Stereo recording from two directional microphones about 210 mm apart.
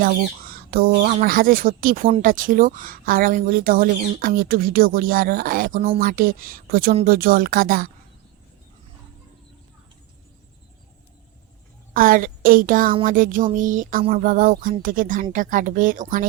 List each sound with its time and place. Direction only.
0.0 s speech: 45° right (ahead or behind)
11.9 s speech: 40° right (ahead or behind)